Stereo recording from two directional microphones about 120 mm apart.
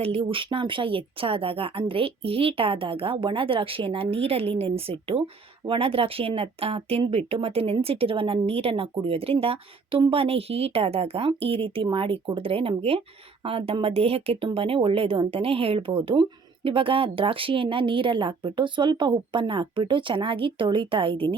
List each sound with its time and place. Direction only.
0.0 s speech: 55° right (ahead or behind)